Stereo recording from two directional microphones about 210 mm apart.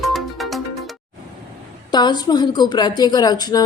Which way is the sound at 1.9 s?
20° left (ahead or behind).